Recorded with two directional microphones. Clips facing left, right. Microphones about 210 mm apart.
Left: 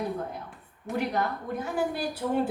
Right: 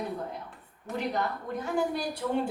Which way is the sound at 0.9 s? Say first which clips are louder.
Left 4 dB; 15° left (ahead or behind).